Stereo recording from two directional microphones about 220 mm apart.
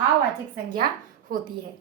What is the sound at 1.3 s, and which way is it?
Speech, 40° right (ahead or behind).